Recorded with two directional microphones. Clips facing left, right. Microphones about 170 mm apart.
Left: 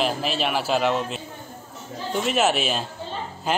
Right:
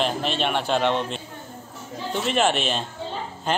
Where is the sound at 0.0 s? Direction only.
5° left (ahead or behind).